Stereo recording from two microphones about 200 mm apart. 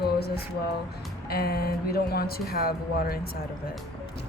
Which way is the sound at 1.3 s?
50° left (ahead or behind).